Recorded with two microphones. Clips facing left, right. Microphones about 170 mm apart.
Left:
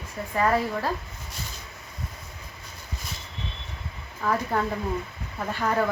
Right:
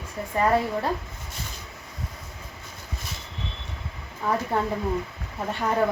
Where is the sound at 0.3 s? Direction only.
25° right (ahead or behind).